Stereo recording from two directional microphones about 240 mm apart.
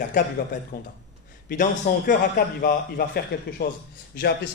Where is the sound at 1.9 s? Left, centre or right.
Left.